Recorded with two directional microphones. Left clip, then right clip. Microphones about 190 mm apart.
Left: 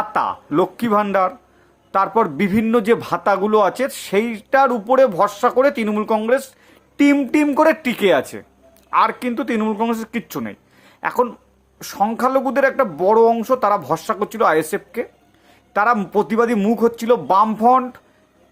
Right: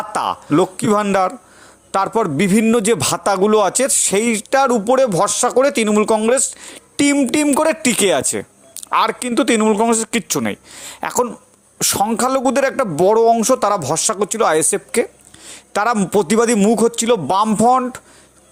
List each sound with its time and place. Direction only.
0.1 s speech: 40° right (ahead or behind)